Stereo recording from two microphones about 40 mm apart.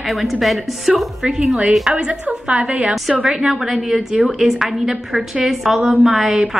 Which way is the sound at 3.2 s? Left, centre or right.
Centre.